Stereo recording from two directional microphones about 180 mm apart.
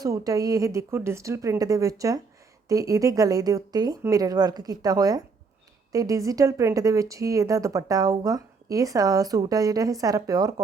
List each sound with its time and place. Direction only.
0.0 s a woman's voice: 20° right (ahead or behind)